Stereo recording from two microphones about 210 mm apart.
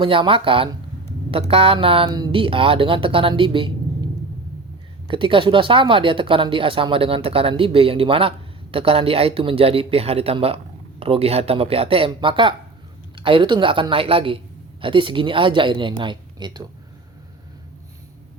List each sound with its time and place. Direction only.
0.0 s a woman's voice: 25° right (ahead or behind)
5.0 s a woman's voice: 25° right (ahead or behind)